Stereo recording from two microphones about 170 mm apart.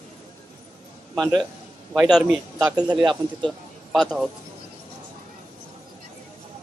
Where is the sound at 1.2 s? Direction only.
Centre (ahead or behind).